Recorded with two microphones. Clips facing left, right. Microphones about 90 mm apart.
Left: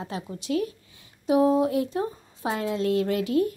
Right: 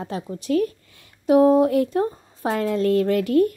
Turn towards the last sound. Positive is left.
turn(degrees=-50)  # may be behind; listen again after turning